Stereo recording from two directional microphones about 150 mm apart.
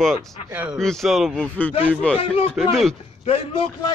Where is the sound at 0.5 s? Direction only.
15° right (ahead or behind).